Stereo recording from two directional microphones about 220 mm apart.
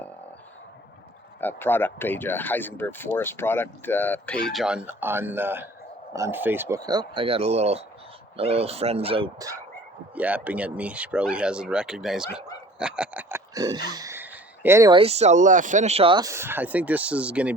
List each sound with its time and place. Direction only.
1.4 s speech: 10° left (ahead or behind); by 9.6 s 20° right (ahead or behind)
10.2 s speech: 5° right (ahead or behind)